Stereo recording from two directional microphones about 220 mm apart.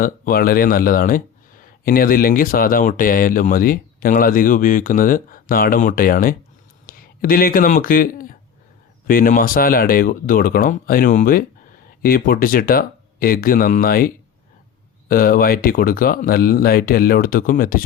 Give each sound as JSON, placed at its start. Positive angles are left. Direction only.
{"t": 0.0, "sound": "speech", "side_deg": 40}
{"t": 15.1, "sound": "speech", "side_deg": 40}